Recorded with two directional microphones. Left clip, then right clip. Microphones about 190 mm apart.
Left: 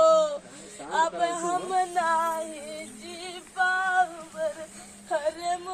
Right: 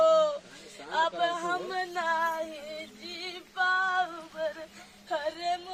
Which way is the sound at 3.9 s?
Centre (ahead or behind).